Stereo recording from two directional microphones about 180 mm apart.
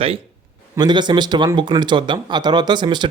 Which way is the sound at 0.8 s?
25° right (ahead or behind).